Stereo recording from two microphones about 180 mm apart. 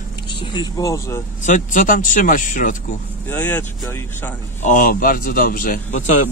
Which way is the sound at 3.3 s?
10° left (ahead or behind).